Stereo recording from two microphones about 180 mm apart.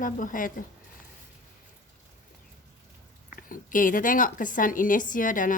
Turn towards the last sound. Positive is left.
turn(degrees=45)  # may be behind; listen again after turning